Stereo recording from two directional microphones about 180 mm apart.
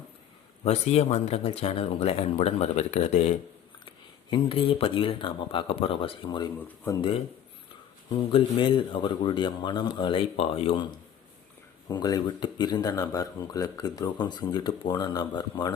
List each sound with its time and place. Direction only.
0.6 s speech: 35° left (ahead or behind); by 7.1 s 20° left (ahead or behind)
8.3 s speech: 30° left (ahead or behind)
11.9 s speech: 20° left (ahead or behind)